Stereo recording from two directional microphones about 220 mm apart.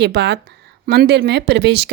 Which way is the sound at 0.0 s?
50° right (ahead or behind).